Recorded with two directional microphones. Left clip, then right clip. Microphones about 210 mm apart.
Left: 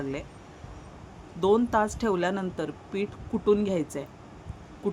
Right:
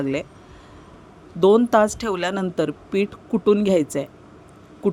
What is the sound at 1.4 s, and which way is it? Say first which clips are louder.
A man's voice: right 8 dB; 35° right (ahead or behind).